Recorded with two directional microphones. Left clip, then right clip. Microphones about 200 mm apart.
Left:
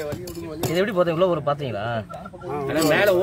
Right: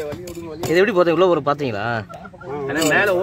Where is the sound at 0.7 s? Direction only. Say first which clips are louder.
Right 5 dB; 55° right (ahead or behind).